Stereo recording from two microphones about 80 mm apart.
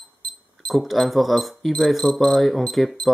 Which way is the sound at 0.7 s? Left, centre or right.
Centre.